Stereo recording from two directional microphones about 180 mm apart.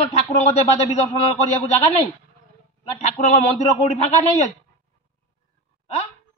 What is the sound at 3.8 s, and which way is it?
Speech, 35° left (ahead or behind).